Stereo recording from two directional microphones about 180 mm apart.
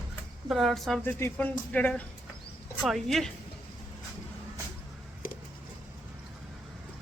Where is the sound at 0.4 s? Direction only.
Centre (ahead or behind).